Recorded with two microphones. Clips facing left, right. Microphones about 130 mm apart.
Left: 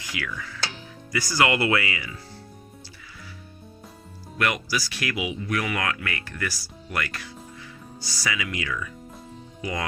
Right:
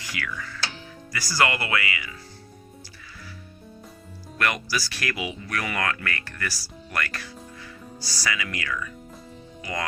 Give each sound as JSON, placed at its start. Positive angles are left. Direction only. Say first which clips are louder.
{"t": 0.0, "sound": "music", "louder": "left 1 dB", "side_deg": 20}
{"t": 1.1, "sound": "speech", "louder": "left 2 dB", "side_deg": 20}
{"t": 4.4, "sound": "speech", "louder": "left 1 dB", "side_deg": 15}